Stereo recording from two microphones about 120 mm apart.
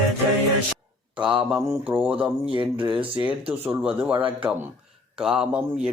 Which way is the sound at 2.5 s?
45° right (ahead or behind).